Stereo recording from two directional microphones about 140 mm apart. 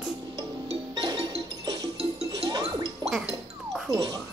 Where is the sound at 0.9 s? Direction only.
25° right (ahead or behind).